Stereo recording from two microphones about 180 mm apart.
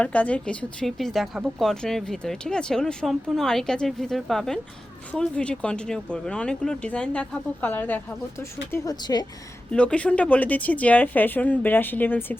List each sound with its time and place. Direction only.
0.0 s a woman's voice: 10° left (ahead or behind)
9.7 s speech: 5° left (ahead or behind)